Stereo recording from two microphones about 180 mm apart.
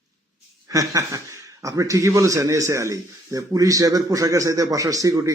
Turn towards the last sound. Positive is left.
turn(degrees=-20)  # may be behind; listen again after turning